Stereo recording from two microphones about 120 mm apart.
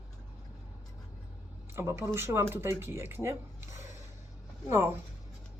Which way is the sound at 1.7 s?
20° right (ahead or behind).